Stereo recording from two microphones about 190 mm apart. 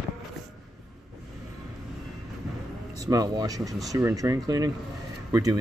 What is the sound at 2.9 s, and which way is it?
Speech, 20° right (ahead or behind).